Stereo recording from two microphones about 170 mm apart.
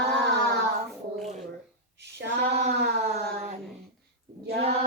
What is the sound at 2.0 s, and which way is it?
Child singing, 90° right.